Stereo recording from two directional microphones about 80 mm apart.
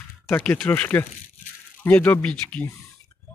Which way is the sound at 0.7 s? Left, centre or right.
Left.